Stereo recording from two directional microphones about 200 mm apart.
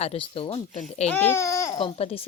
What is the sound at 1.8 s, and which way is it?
Speech, 30° left (ahead or behind).